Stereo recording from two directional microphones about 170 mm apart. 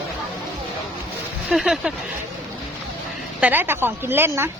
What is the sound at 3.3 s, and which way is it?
A woman's voice, 10° right (ahead or behind).